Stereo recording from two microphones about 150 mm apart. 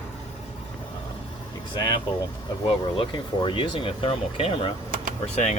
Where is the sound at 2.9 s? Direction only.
35° left (ahead or behind).